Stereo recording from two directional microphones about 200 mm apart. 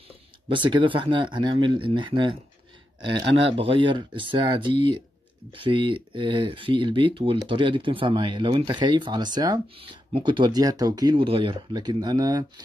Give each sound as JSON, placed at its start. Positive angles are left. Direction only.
{"t": 0.5, "sound": "speech", "side_deg": -25}